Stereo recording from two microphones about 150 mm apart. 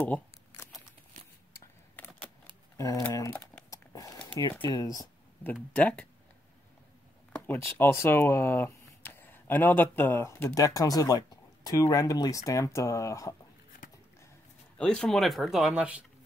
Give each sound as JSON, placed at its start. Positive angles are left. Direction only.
{"t": 0.0, "sound": "a sound", "side_deg": 10}
{"t": 2.0, "sound": "camera", "side_deg": 10}
{"t": 2.8, "sound": "crumpling", "side_deg": 20}
{"t": 4.4, "sound": "speech", "side_deg": 30}
{"t": 5.4, "sound": "speech", "side_deg": 10}
{"t": 7.3, "sound": "a sound", "side_deg": 15}
{"t": 7.7, "sound": "speech", "side_deg": 15}
{"t": 14.8, "sound": "speech", "side_deg": 5}